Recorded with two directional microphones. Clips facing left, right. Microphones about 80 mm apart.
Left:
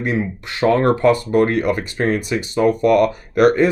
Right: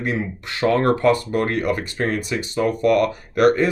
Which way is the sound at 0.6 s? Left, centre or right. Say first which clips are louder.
Left 3 dB; left.